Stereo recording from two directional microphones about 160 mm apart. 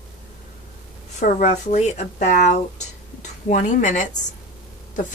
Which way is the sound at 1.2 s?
50° left (ahead or behind).